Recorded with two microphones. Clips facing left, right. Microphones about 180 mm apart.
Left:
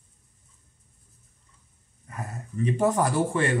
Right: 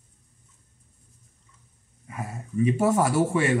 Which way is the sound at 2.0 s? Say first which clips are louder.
Right 2 dB; 10° right (ahead or behind).